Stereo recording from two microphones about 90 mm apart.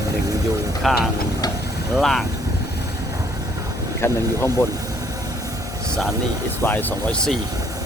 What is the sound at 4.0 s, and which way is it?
Speech, 30° left (ahead or behind).